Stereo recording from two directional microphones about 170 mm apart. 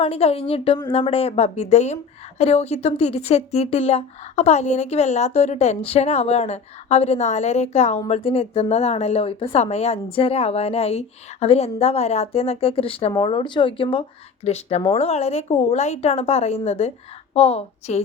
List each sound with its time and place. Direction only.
0.0 s speech: 35° left (ahead or behind)